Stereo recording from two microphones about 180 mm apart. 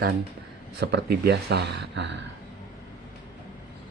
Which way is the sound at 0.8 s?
65° right (ahead or behind).